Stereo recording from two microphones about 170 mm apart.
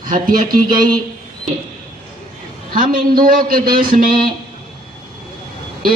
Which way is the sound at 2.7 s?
55° right (ahead or behind).